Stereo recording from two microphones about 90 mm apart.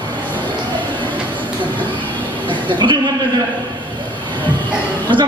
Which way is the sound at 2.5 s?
65° right (ahead or behind).